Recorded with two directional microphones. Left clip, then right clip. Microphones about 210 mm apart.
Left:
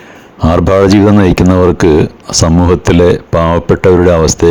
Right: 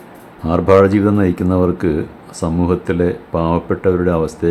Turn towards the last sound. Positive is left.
turn(degrees=40)  # may be behind; listen again after turning